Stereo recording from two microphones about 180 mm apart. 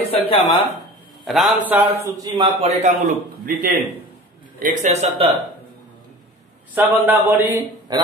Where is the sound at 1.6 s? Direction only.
15° right (ahead or behind).